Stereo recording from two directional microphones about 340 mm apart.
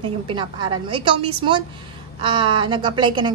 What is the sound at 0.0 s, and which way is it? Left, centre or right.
A woman's voice, centre.